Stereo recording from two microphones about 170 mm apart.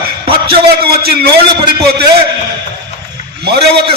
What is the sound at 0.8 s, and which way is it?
Speech, 65° right (ahead or behind).